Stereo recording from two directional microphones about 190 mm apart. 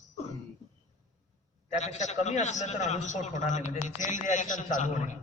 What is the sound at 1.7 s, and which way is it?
A man's voice, 40° left (ahead or behind).